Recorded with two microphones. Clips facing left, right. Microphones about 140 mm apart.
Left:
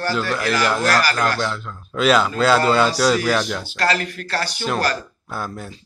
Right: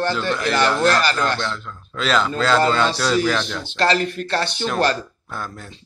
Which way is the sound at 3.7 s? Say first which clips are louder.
Right 4 dB; 25° right (ahead or behind).